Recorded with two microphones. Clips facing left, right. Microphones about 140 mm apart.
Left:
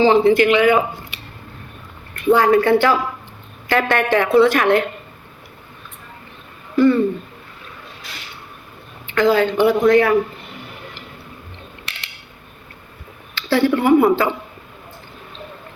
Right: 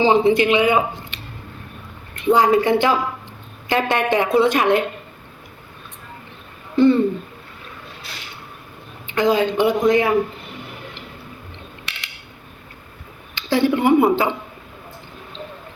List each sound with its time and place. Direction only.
0.0 s speech: 20° right (ahead or behind)
2.2 s speech: 20° right (ahead or behind)
6.7 s speech: 25° right (ahead or behind)
9.0 s speech: 15° right (ahead or behind)
13.3 s speech: 15° right (ahead or behind)